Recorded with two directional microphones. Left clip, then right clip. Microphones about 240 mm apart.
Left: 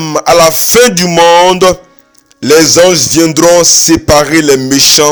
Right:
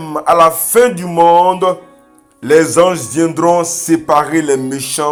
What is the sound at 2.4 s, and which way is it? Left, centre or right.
Speech, left.